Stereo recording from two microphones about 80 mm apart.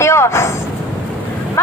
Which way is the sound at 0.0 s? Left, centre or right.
Left.